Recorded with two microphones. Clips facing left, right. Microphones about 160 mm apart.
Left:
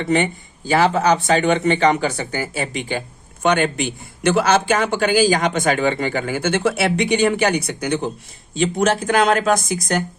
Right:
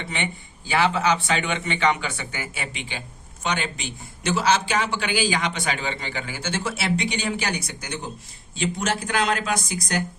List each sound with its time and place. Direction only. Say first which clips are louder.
0.0 s speech: left 11 dB; 45° left (ahead or behind)
3.4 s a man's voice: left 10 dB; 55° left (ahead or behind)
8.5 s speech: left 8 dB; 50° left (ahead or behind)